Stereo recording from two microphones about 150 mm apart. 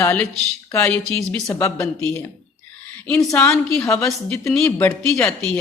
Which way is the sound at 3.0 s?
10° left (ahead or behind).